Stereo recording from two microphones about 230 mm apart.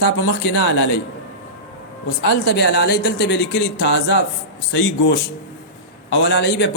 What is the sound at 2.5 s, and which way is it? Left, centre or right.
A man's voice, left.